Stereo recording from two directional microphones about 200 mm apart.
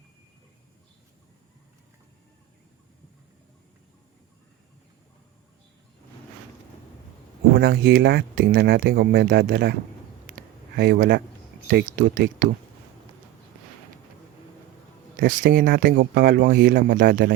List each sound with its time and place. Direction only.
7.5 s speech: 50° right (ahead or behind)
10.8 s speech: 50° right (ahead or behind)
15.1 s speech: 45° right (ahead or behind)